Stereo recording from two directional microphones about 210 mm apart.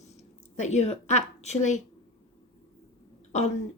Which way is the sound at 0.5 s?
35° left (ahead or behind).